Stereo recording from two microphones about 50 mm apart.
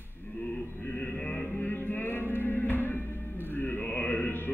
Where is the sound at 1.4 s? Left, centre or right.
Left.